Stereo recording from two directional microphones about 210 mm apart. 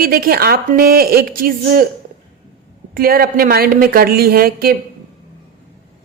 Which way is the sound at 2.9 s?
45° right (ahead or behind).